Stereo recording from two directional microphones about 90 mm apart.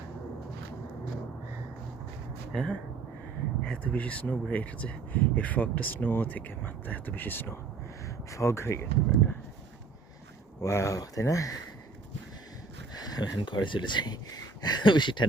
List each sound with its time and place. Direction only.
2.5 s speech: 5° left (ahead or behind)
3.9 s speech: 15° left (ahead or behind)
8.0 s speech: 35° left (ahead or behind)
10.6 s speech: 35° left (ahead or behind)
12.9 s speech: 45° left (ahead or behind)